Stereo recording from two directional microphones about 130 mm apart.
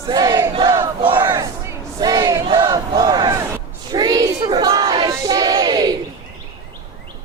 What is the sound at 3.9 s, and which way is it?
Battle cry, 30° right (ahead or behind).